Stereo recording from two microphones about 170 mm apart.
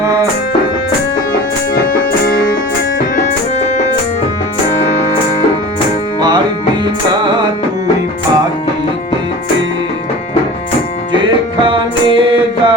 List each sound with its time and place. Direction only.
1.7 s music: 55° left (ahead or behind)
11.6 s music: 30° right (ahead or behind)